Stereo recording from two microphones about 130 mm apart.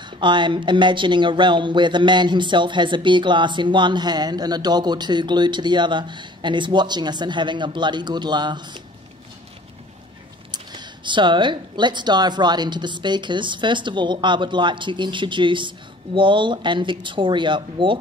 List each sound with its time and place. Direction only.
0.2 s speech: 35° right (ahead or behind)
10.5 s speech: 35° right (ahead or behind)